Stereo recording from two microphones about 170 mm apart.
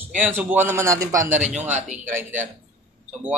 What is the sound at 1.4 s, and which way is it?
Speech, 45° right (ahead or behind).